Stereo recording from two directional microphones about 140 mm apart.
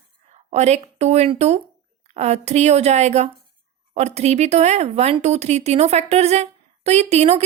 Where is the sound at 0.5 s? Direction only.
55° right (ahead or behind).